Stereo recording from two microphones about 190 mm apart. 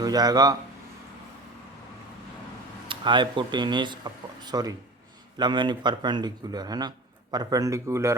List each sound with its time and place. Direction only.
0.0 s speech: 20° right (ahead or behind)
2.9 s speech: 25° right (ahead or behind)